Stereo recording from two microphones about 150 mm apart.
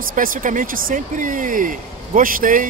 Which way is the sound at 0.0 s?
65° right (ahead or behind).